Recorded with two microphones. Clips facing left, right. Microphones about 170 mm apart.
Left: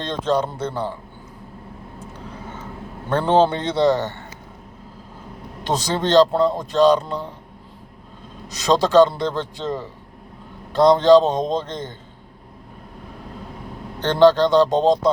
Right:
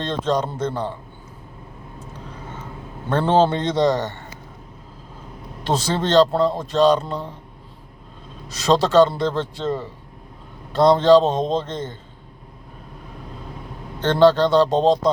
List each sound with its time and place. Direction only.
0.0 s a man's voice: 15° left (ahead or behind)
3.1 s a man's voice: 15° left (ahead or behind)
3.8 s speech: 15° right (ahead or behind)
5.6 s a man's voice: 15° left (ahead or behind)
8.4 s a man's voice: 15° left (ahead or behind)
14.2 s speech: 10° right (ahead or behind)
14.5 s a man's voice: 15° left (ahead or behind)